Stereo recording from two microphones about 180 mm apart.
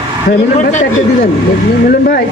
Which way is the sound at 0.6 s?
45° left (ahead or behind).